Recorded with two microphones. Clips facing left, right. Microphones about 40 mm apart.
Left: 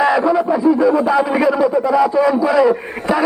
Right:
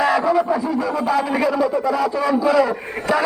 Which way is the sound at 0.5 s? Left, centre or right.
Left.